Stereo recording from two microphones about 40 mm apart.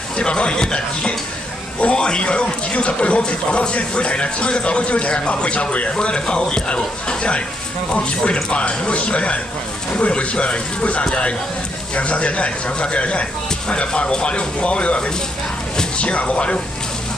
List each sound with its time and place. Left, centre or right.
0.2 s speech: left